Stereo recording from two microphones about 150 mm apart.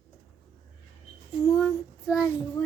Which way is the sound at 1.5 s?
Centre (ahead or behind).